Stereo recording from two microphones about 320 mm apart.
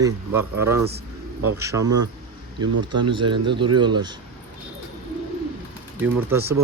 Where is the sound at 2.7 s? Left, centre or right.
Right.